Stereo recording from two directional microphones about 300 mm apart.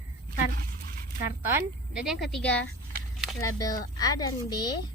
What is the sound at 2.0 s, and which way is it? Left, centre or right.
Speech, centre.